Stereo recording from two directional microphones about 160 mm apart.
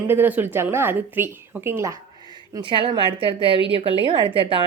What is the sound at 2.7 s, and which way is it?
Speech, 30° right (ahead or behind).